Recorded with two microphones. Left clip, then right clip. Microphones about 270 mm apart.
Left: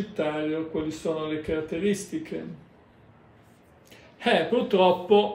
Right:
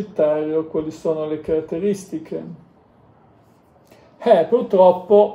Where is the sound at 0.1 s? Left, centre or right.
Centre.